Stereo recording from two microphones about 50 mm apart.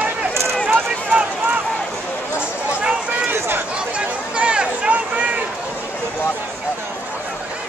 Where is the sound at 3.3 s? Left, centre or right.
Right.